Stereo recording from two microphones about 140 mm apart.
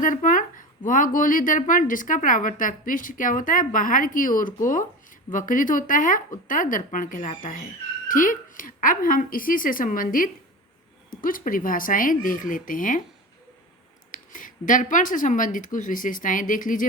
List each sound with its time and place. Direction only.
0.0 s speech: 70° left (ahead or behind)
14.1 s speech: 70° left (ahead or behind)